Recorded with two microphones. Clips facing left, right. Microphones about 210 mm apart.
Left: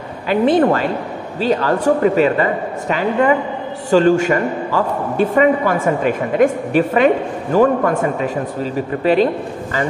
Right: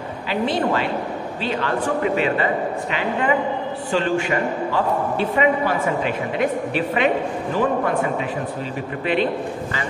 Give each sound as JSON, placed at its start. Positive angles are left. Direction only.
{"t": 0.3, "sound": "a man's voice", "side_deg": 50}